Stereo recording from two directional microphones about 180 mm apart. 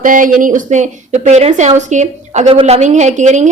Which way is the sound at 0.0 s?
50° right (ahead or behind).